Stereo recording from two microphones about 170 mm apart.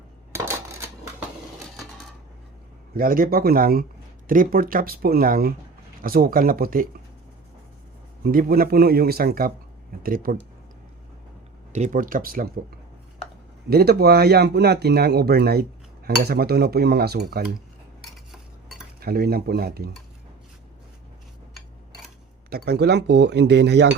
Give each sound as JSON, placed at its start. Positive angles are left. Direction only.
{"t": 0.3, "sound": "coin", "side_deg": -15}
{"t": 2.9, "sound": "speech", "side_deg": -55}
{"t": 8.2, "sound": "speech", "side_deg": -60}
{"t": 11.7, "sound": "speech", "side_deg": -45}
{"t": 13.7, "sound": "speech", "side_deg": -65}
{"t": 18.9, "sound": "speech", "side_deg": -60}
{"t": 22.4, "sound": "speech", "side_deg": -65}